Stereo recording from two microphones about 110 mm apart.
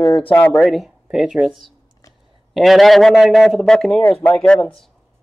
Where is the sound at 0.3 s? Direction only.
15° left (ahead or behind).